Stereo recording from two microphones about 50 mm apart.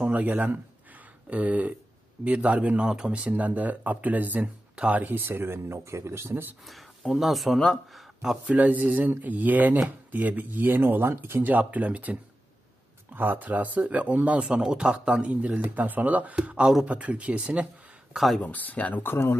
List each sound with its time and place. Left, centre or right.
0.2 s speech: right
5.0 s speech: right
6.6 s a sound: centre
7.2 s speech: centre
8.5 s speech: right
11.4 s speech: right
14.4 s speech: centre
15.6 s speech: right
16.4 s speech: right
18.1 s speech: centre
18.4 s speech: left
18.9 s speech: left